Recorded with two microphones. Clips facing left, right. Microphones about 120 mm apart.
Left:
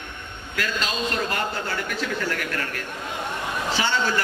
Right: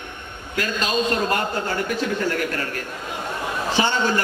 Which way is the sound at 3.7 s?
20° right (ahead or behind).